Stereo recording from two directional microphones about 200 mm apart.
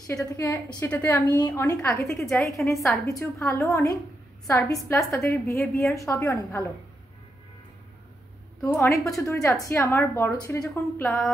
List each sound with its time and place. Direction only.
0.0 s a woman's voice: 15° left (ahead or behind)
2.1 s a woman's voice: centre (ahead or behind)
2.4 s a woman's voice: 15° left (ahead or behind)
8.5 s a woman's voice: 5° left (ahead or behind)
11.1 s a woman's voice: centre (ahead or behind)